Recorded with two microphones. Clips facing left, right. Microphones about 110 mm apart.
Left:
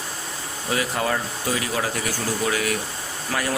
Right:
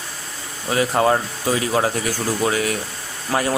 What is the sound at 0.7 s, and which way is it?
Speech, 35° right (ahead or behind).